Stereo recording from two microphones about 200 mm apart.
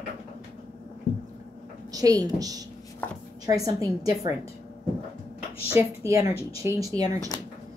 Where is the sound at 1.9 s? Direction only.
20° right (ahead or behind).